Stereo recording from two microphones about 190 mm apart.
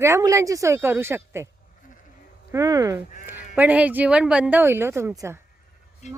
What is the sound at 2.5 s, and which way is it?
Speech, 20° right (ahead or behind).